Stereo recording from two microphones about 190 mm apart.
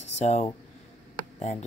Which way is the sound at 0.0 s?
35° left (ahead or behind).